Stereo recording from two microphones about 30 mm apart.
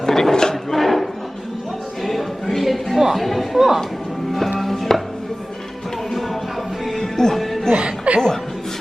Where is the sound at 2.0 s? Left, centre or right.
Centre.